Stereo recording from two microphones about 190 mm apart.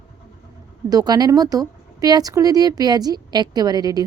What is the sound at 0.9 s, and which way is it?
Speech, 20° right (ahead or behind).